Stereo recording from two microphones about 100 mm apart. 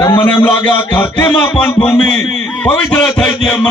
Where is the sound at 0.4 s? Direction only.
15° left (ahead or behind).